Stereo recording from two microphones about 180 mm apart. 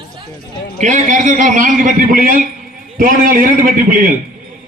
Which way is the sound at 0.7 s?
45° right (ahead or behind).